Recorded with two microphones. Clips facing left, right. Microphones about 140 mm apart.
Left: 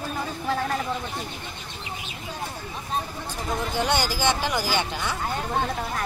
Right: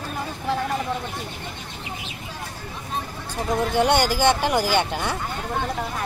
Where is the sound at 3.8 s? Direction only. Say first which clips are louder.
Right 6 dB; 55° right (ahead or behind).